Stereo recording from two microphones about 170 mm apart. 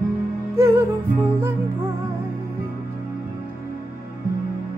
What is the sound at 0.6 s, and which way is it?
Music, 15° right (ahead or behind).